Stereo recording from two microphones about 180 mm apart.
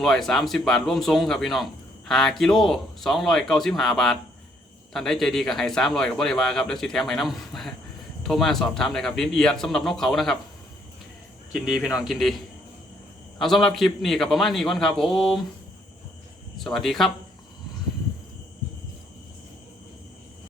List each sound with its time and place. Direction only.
0.0 s speech: centre (ahead or behind)
11.5 s speech: 5° right (ahead or behind)
13.4 s speech: centre (ahead or behind)
16.6 s speech: centre (ahead or behind)